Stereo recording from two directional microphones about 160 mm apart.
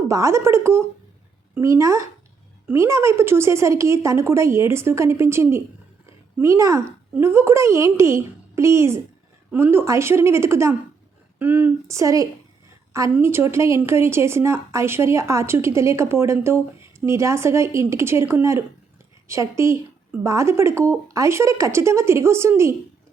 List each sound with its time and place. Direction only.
0.1 s a woman's voice: 20° right (ahead or behind)